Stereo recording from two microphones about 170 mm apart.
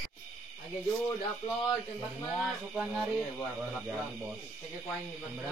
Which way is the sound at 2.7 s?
Centre (ahead or behind).